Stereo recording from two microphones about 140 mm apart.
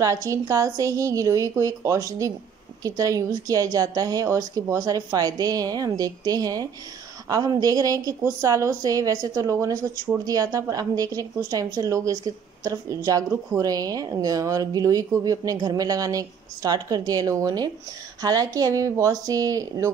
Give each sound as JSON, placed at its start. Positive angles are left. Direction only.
{"t": 0.0, "sound": "a woman's voice", "side_deg": -25}